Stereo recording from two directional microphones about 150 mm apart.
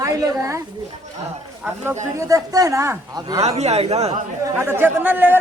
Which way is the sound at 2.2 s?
20° right (ahead or behind).